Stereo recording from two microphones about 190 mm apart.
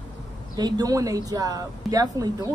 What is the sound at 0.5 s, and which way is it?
A woman's voice, 20° right (ahead or behind).